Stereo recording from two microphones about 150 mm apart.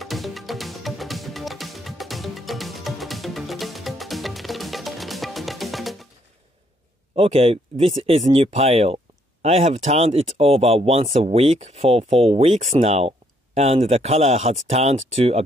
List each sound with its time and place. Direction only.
0.0 s music: centre (ahead or behind)
7.2 s speech: 40° right (ahead or behind)